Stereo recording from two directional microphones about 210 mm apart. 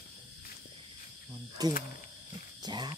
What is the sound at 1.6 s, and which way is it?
Speech, 20° right (ahead or behind).